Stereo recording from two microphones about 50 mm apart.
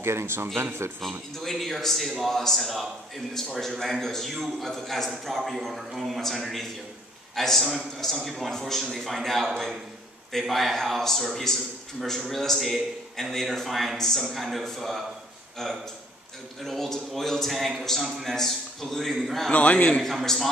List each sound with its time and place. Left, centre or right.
0.0 s speech: right
1.4 s a man's voice: centre
19.5 s a man's voice: left
20.0 s a man's voice: centre